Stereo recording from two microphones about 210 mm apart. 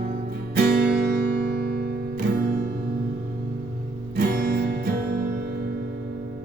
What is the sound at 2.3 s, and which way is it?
Music, 45° right (ahead or behind).